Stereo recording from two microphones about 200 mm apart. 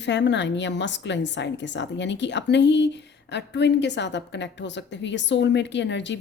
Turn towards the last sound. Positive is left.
turn(degrees=60)  # may be behind; listen again after turning